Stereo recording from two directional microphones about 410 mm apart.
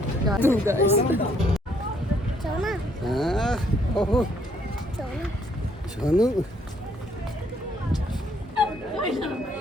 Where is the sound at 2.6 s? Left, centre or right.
Centre.